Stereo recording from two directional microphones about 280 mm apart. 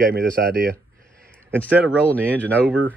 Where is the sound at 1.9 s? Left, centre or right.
Centre.